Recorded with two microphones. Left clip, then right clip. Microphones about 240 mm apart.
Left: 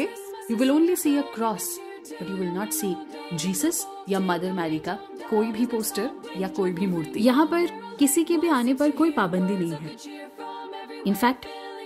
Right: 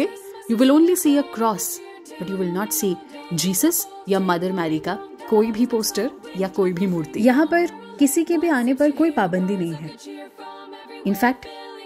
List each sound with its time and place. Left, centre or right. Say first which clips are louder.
0.0 s a woman's voice: right 5 dB; centre
11.1 s a woman's voice: right 3 dB; centre